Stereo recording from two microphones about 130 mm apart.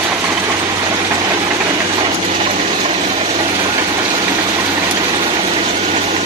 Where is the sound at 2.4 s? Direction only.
45° right (ahead or behind).